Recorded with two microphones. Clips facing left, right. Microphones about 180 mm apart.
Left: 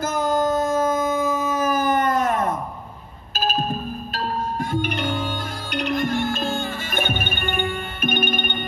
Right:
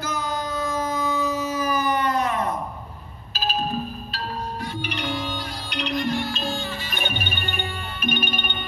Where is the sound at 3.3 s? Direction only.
50° left (ahead or behind).